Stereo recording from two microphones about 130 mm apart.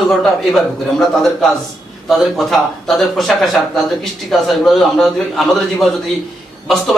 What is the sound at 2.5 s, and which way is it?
A man's voice, centre (ahead or behind).